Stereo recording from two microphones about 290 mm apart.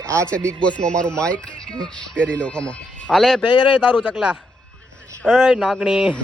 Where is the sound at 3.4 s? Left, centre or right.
Centre.